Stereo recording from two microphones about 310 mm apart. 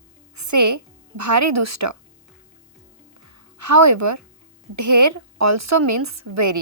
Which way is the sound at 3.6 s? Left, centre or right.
Right.